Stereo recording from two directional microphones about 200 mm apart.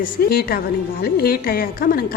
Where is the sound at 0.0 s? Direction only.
50° left (ahead or behind).